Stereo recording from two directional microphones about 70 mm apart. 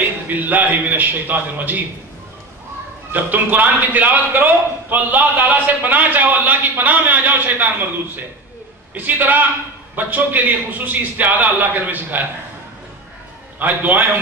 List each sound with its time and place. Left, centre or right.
0.3 s a man's voice: right
3.1 s a man's voice: right
8.9 s a man's voice: right
13.6 s a man's voice: right